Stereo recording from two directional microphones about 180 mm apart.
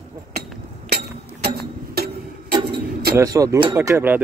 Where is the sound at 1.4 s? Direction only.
60° right (ahead or behind).